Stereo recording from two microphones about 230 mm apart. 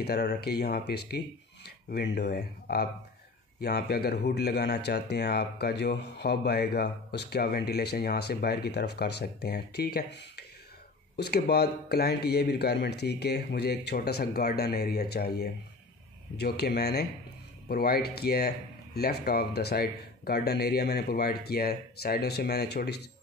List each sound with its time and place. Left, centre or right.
0.0 s speech: left